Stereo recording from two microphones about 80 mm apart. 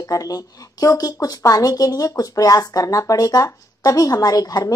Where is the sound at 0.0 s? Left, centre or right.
Left.